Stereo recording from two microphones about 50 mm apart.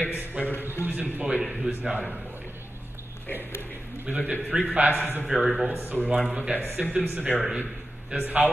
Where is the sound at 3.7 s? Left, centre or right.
Right.